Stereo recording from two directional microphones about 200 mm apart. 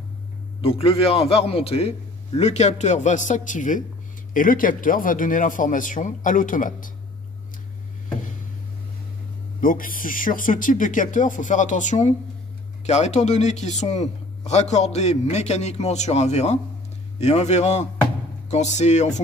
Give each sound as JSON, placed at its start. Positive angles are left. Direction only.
{"t": 0.6, "sound": "a man's voice", "side_deg": 30}
{"t": 9.6, "sound": "a man's voice", "side_deg": 45}